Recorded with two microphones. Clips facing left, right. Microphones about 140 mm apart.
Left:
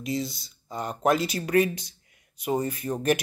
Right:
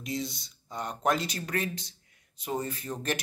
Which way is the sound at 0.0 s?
Centre (ahead or behind).